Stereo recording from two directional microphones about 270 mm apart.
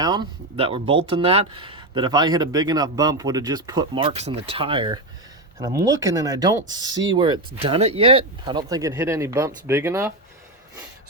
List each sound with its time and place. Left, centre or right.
0.0 s speech: centre